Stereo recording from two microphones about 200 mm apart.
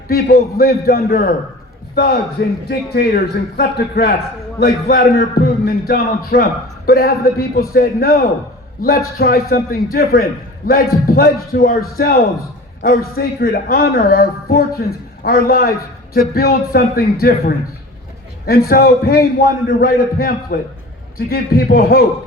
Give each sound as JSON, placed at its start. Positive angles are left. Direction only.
{"t": 0.1, "sound": "a man's voice", "side_deg": 50}
{"t": 2.6, "sound": "a man's voice", "side_deg": 50}